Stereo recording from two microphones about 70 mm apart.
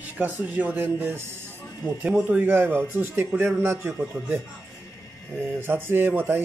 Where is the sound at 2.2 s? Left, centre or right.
Right.